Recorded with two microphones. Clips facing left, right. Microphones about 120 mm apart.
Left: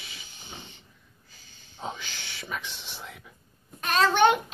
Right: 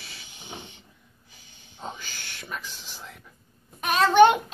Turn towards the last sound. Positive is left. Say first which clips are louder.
# right 4 dB
turn(degrees=-10)  # may be behind; listen again after turning